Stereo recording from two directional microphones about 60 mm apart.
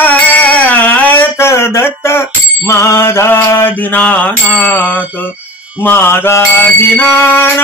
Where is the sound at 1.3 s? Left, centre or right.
Left.